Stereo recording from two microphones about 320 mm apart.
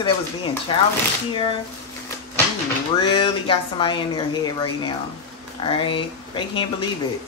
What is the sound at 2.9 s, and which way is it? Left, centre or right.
Speech, centre.